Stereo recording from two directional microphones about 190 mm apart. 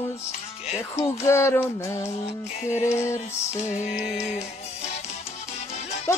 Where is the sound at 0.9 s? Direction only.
15° left (ahead or behind).